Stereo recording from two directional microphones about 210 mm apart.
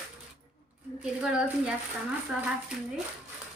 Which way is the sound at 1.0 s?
5° right (ahead or behind).